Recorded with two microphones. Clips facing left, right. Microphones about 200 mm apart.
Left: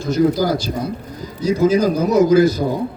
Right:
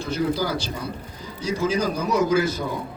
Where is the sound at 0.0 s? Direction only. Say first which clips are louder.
Left 8 dB; 45° left (ahead or behind).